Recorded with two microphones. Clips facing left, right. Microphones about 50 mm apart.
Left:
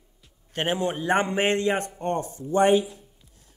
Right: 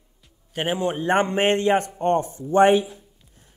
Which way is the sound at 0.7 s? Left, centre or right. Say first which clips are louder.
Right 2 dB; right.